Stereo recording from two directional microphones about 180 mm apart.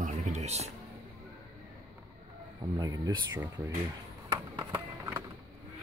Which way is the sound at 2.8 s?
20° right (ahead or behind).